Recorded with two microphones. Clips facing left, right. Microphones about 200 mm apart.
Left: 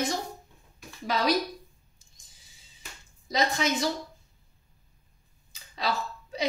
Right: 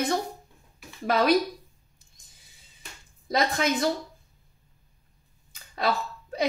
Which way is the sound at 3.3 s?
55° right (ahead or behind).